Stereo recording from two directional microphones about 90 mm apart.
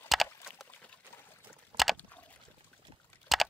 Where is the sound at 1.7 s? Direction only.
Centre (ahead or behind).